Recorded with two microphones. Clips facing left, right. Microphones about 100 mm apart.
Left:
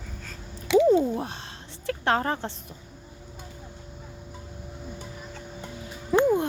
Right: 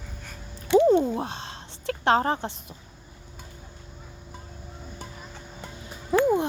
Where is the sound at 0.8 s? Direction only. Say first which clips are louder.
Even; 30° right (ahead or behind).